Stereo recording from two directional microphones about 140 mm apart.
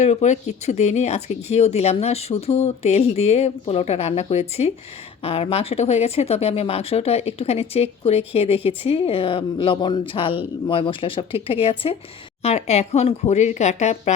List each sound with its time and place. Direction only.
0.0 s speech: 55° left (ahead or behind)